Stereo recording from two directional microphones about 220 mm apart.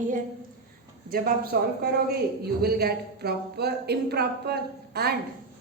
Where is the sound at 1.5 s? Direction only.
45° right (ahead or behind).